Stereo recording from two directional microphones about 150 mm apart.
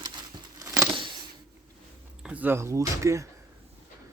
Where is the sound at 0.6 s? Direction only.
20° right (ahead or behind).